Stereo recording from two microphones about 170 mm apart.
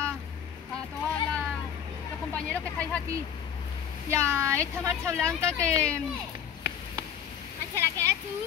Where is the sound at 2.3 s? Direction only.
10° left (ahead or behind).